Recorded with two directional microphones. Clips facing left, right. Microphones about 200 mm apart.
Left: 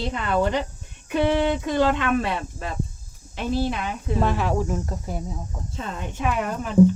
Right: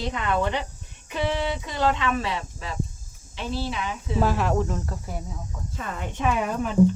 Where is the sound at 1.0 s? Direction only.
55° left (ahead or behind).